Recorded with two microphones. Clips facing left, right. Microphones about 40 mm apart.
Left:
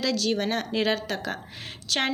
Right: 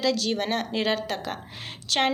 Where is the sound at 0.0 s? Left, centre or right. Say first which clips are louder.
Even; centre.